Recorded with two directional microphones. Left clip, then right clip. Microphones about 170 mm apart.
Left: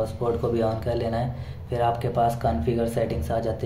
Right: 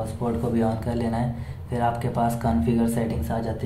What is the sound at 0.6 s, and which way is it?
Speech, 20° left (ahead or behind).